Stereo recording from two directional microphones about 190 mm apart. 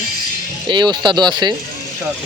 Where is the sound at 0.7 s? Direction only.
25° right (ahead or behind).